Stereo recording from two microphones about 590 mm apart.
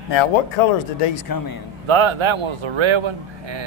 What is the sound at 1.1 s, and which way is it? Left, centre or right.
Speech, left.